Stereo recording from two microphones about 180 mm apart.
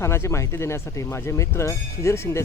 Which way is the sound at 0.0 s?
15° left (ahead or behind).